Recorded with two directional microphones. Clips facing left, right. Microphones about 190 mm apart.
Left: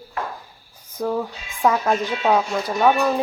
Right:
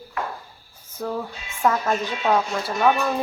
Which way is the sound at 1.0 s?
10° left (ahead or behind).